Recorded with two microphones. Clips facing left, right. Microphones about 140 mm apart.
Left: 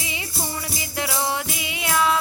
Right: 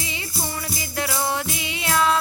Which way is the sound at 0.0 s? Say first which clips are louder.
Even; 15° left (ahead or behind).